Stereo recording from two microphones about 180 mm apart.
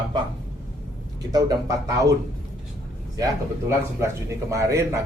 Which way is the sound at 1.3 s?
20° right (ahead or behind).